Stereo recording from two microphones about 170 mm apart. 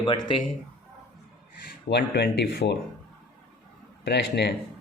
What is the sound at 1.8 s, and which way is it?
Speech, 80° left.